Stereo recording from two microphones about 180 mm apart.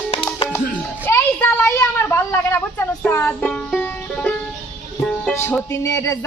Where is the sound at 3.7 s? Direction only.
5° left (ahead or behind).